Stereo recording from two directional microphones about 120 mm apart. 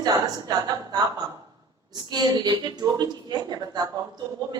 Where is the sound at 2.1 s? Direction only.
35° right (ahead or behind).